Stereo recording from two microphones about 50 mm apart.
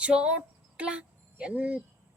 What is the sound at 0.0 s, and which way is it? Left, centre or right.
A woman's voice, right.